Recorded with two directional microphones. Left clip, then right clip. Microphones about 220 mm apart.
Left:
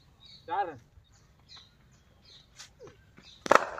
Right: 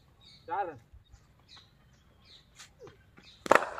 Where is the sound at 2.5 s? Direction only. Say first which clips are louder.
Left 2 dB; centre (ahead or behind).